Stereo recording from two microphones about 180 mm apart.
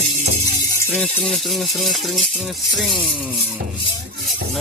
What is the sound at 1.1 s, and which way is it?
Rattle, centre (ahead or behind).